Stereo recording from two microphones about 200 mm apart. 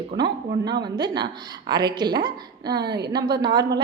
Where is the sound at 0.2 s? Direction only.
20° right (ahead or behind).